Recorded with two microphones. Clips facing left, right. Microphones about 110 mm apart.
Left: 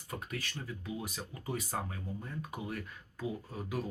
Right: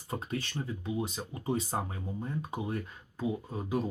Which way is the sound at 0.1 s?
25° right (ahead or behind).